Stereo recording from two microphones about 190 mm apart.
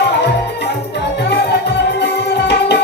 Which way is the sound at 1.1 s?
60° left (ahead or behind).